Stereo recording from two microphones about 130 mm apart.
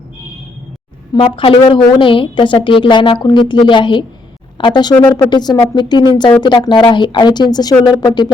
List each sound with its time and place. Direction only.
1.1 s a woman's voice: 45° left (ahead or behind)